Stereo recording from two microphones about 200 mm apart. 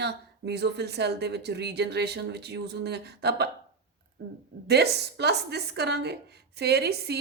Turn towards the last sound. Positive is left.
turn(degrees=-55)  # may be behind; listen again after turning